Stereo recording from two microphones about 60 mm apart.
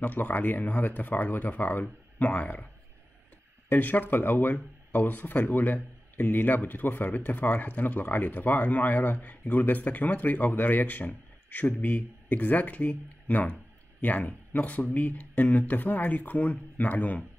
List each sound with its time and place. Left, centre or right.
0.0 s speech: left
3.6 s speech: left